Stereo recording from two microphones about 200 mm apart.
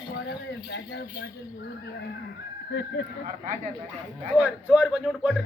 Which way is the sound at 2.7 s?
55° left (ahead or behind).